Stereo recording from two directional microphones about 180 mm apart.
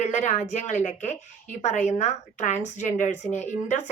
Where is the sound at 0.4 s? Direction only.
40° left (ahead or behind).